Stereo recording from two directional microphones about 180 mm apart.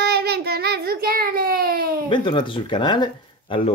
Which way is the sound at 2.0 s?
25° left (ahead or behind).